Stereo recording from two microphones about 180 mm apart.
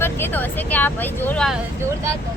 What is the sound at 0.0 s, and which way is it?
Speech, 10° left (ahead or behind).